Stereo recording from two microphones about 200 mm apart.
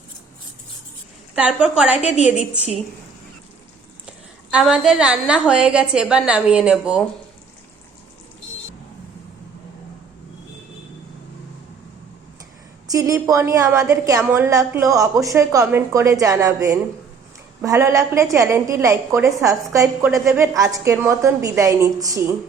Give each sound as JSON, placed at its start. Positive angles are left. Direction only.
{"t": 1.4, "sound": "a woman's voice", "side_deg": -5}
{"t": 4.5, "sound": "a woman's voice", "side_deg": -5}
{"t": 12.9, "sound": "a woman's voice", "side_deg": -15}